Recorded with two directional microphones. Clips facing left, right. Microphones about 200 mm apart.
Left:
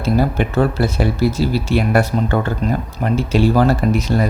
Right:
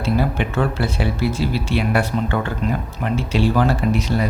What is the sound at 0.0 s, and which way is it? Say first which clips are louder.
Speech: left 3 dB; 40° left (ahead or behind).